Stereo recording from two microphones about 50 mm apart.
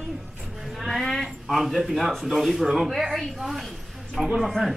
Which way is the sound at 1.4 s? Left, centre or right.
Centre.